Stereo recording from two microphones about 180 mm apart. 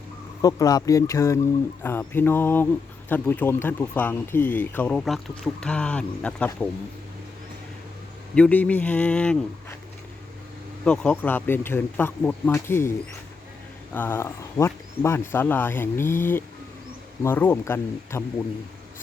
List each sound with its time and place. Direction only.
0.4 s speech: 20° left (ahead or behind)
8.4 s speech: 5° left (ahead or behind)
10.8 s speech: 5° left (ahead or behind)
13.9 s speech: 10° left (ahead or behind)